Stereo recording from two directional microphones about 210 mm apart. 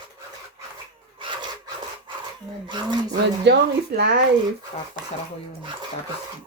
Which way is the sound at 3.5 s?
55° right (ahead or behind).